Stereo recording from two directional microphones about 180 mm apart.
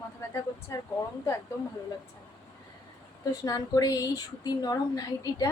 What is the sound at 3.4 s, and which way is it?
A woman's voice, 20° left (ahead or behind).